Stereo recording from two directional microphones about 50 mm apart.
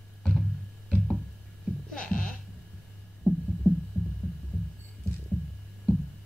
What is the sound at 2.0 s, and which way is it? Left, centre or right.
Music, left.